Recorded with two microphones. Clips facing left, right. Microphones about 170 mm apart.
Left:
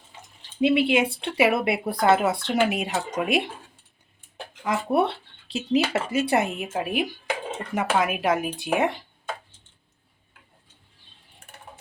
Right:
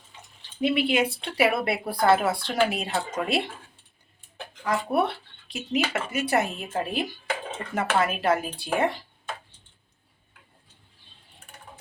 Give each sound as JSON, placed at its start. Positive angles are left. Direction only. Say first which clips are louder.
{"t": 0.6, "sound": "speech", "louder": "left 3 dB", "side_deg": 20}
{"t": 4.6, "sound": "speech", "louder": "left 2 dB", "side_deg": 25}